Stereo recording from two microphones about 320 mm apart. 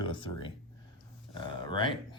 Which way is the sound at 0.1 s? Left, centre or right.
Centre.